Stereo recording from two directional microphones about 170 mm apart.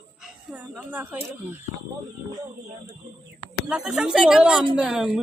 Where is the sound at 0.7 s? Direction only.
10° right (ahead or behind).